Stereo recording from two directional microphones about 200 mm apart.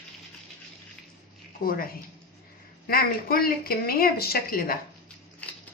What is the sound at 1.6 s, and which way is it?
Speech, 45° left (ahead or behind).